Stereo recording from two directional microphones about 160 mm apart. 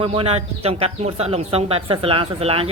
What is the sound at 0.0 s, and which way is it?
Speech, 35° right (ahead or behind).